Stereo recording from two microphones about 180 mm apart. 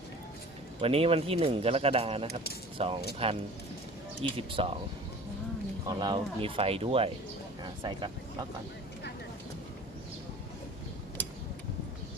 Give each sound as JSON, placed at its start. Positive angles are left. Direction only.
{"t": 0.8, "sound": "speech", "side_deg": -30}
{"t": 6.0, "sound": "speech", "side_deg": -25}